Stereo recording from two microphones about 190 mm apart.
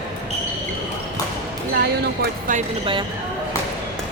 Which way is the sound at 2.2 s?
45° right (ahead or behind).